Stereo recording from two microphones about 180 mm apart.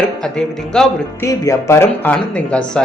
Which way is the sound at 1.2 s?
15° left (ahead or behind).